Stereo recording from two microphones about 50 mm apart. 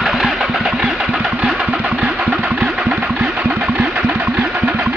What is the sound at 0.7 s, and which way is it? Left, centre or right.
Engine, right.